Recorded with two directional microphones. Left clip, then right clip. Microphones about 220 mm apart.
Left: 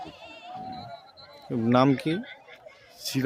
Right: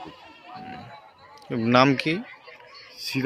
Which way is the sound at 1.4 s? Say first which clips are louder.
Right 3 dB; 10° left (ahead or behind).